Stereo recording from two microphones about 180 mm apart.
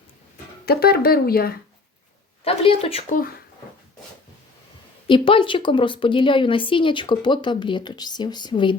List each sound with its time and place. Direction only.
0.6 s speech: 60° left (ahead or behind)
2.4 s speech: 30° left (ahead or behind)
5.0 s a woman's voice: 30° left (ahead or behind)